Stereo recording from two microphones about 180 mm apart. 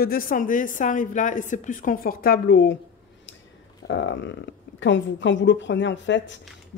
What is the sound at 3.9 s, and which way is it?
Speech, 90° left.